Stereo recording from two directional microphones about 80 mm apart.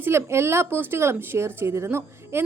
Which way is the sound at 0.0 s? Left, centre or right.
Right.